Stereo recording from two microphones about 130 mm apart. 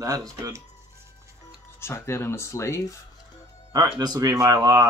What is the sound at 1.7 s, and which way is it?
Speech, 20° left (ahead or behind).